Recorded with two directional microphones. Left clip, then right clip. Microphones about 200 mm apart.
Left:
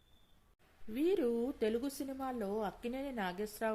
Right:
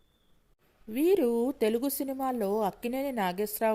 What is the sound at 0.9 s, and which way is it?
Speech, 35° right (ahead or behind).